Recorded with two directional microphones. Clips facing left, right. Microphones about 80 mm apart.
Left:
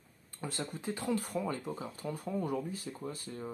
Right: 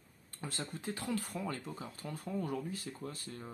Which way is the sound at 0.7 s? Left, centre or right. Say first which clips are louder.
Left 4 dB; centre.